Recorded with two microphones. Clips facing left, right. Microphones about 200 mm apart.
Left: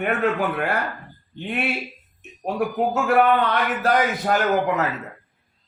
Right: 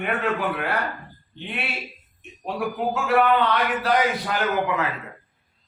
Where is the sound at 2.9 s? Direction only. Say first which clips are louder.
Left 1 dB; 45° left (ahead or behind).